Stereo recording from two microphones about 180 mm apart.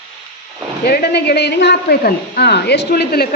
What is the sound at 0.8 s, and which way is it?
A woman's voice, 60° left (ahead or behind).